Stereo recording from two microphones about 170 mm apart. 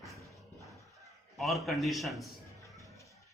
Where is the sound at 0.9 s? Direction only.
Centre (ahead or behind).